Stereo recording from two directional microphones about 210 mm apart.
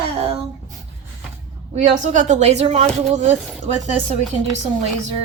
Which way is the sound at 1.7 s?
35° right (ahead or behind).